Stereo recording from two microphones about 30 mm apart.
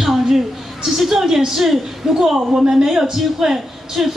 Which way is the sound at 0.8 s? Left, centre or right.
Centre.